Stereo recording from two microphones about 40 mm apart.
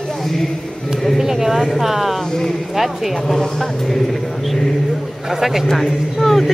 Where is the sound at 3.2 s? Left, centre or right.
Centre.